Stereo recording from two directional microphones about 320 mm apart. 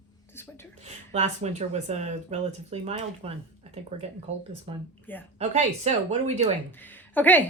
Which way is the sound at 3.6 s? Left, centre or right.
Centre.